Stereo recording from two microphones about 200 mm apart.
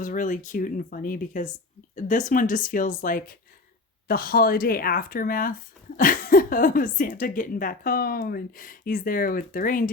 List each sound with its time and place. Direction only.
0.0 s speech: 40° left (ahead or behind)